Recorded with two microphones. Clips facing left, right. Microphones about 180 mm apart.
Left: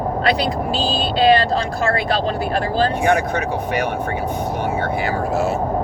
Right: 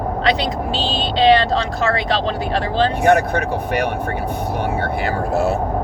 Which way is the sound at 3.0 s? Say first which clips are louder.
Right 3 dB; 60° right (ahead or behind).